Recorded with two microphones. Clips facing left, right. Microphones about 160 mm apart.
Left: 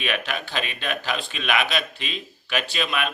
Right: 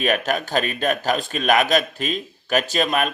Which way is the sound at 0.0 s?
45° right (ahead or behind).